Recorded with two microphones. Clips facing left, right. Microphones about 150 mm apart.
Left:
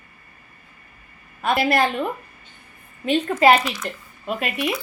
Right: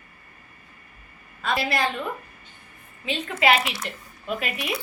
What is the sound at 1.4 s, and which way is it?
Speech, 55° left (ahead or behind).